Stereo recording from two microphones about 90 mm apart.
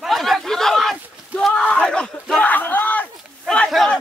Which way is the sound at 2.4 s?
20° left (ahead or behind).